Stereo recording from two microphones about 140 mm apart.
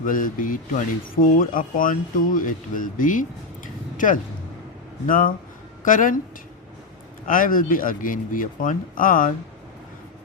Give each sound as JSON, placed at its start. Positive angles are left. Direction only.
{"t": 0.0, "sound": "speech", "side_deg": 75}
{"t": 7.3, "sound": "speech", "side_deg": 75}